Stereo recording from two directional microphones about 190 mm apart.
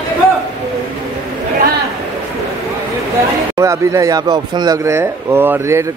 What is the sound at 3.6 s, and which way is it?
Speech, 15° right (ahead or behind).